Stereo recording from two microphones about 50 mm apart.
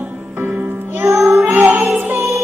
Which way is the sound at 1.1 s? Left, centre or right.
Right.